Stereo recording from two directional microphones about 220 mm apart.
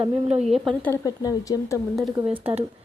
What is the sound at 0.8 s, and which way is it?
Speech, 10° left (ahead or behind).